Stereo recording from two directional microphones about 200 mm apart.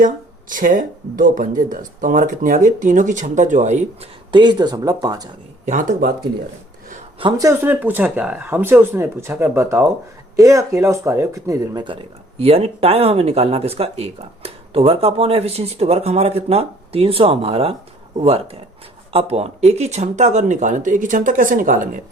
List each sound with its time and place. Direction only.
0.5 s speech: 40° right (ahead or behind); by 5.3 s 20° right (ahead or behind)
6.0 s speech: 50° right (ahead or behind)
7.2 s speech: 20° right (ahead or behind)
19.1 s speech: 30° right (ahead or behind)